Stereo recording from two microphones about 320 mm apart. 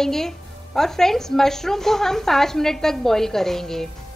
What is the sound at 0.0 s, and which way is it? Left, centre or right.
A woman's voice, centre.